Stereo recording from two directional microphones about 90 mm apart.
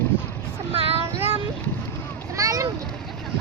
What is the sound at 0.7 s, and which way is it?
Child singing, 90° right.